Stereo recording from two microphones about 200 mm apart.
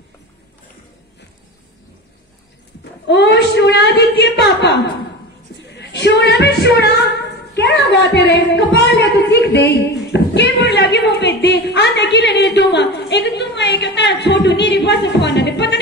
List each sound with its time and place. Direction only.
2.8 s a woman's voice: 55° left (ahead or behind)
5.8 s a sound: 60° left (ahead or behind)
7.5 s a woman's voice: 60° left (ahead or behind)